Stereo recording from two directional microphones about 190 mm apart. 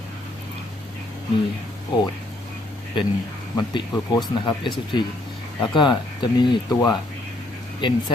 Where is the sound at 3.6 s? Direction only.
20° left (ahead or behind).